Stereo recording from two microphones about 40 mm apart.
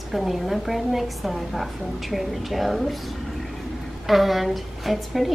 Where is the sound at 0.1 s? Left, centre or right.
Centre.